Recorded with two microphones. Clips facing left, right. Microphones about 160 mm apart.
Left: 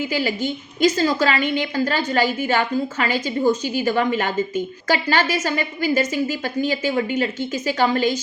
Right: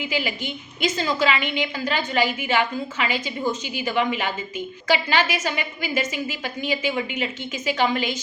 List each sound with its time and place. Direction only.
0.0 s a woman's voice: 40° left (ahead or behind)